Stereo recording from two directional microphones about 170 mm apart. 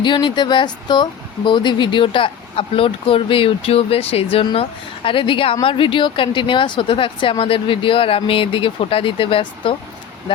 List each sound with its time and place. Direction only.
0.0 s speech: 25° left (ahead or behind)